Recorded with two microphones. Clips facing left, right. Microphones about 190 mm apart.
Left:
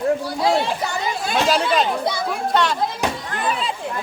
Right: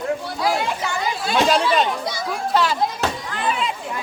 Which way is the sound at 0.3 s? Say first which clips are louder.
Left 3 dB; 25° left (ahead or behind).